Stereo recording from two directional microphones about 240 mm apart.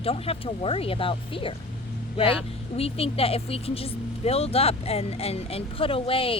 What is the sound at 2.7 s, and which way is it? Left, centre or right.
Speech, left.